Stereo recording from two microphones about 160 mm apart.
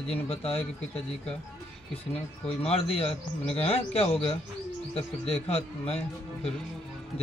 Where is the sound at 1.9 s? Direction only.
40° left (ahead or behind).